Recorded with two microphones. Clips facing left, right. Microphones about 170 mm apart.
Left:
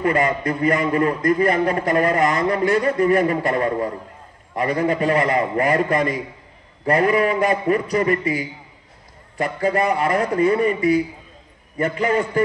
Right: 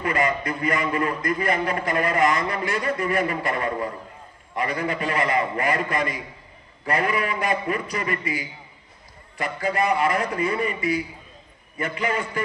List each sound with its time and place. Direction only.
0.0 s a man's voice: 35° left (ahead or behind)